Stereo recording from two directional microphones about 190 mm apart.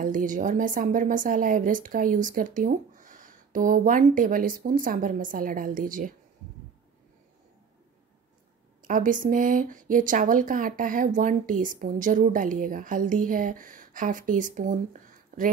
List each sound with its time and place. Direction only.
0.0 s speech: 45° right (ahead or behind)
8.8 s speech: 45° right (ahead or behind)